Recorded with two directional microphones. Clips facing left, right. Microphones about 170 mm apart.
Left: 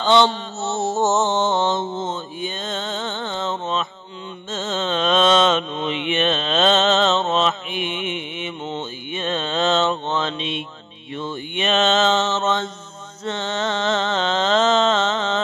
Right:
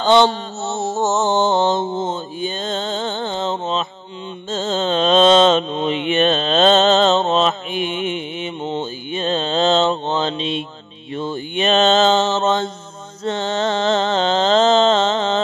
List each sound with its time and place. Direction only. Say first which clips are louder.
0.0 s mantra: right 3 dB; 40° right (ahead or behind)
0.6 s mantra: left 1 dB; centre (ahead or behind)
1.2 s mantra: right 3 dB; 35° right (ahead or behind)
13.2 s music: right 4 dB; 35° right (ahead or behind)